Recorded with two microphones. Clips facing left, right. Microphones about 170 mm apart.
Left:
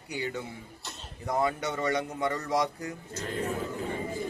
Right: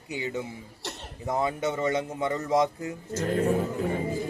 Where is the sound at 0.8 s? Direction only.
70° right (ahead or behind).